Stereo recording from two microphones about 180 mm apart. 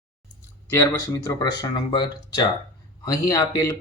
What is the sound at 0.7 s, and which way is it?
Speech, 15° left (ahead or behind).